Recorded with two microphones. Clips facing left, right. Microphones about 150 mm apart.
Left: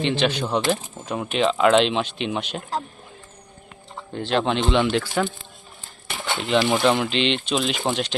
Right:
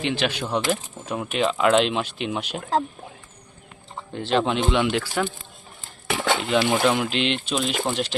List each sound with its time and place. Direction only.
0.0 s speech: 5° right (ahead or behind)
4.1 s speech: centre (ahead or behind)
6.1 s a sound: 90° right
6.5 s speech: 5° right (ahead or behind)